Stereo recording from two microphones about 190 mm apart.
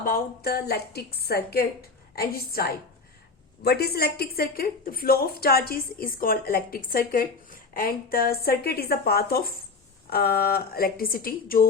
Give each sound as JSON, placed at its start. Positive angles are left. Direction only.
{"t": 0.0, "sound": "a woman's voice", "side_deg": 50}